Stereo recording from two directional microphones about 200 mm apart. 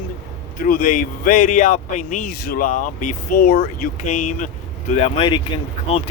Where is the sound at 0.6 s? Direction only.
45° left (ahead or behind).